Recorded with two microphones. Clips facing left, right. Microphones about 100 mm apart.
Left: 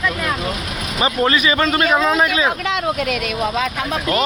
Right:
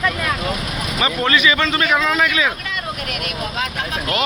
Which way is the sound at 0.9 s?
30° left (ahead or behind).